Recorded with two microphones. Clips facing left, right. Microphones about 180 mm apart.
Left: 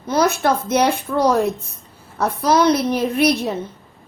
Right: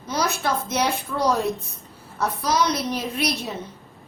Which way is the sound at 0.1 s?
55° left (ahead or behind).